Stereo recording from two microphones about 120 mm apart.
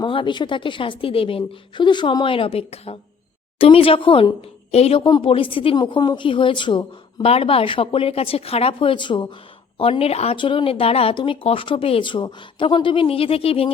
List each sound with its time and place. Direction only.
0.0 s speech: 45° left (ahead or behind)
7.3 s speech: 55° left (ahead or behind)
9.7 s speech: 50° left (ahead or behind)
10.3 s speech: 45° left (ahead or behind)